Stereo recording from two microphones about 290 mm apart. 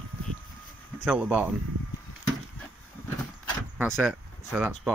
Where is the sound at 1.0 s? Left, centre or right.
Centre.